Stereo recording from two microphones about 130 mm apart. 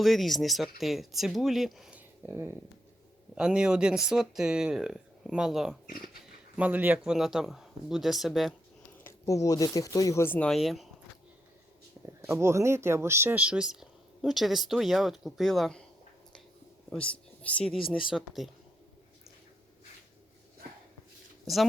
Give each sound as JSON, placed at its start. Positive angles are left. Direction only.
{"t": 0.0, "sound": "speech", "side_deg": 0}
{"t": 3.3, "sound": "speech", "side_deg": -5}
{"t": 9.0, "sound": "speech", "side_deg": 25}
{"t": 10.5, "sound": "speech", "side_deg": 0}
{"t": 12.0, "sound": "speech", "side_deg": -20}
{"t": 17.4, "sound": "speech", "side_deg": 5}
{"t": 17.7, "sound": "speech", "side_deg": 45}
{"t": 18.1, "sound": "speech", "side_deg": 0}
{"t": 21.4, "sound": "speech", "side_deg": 0}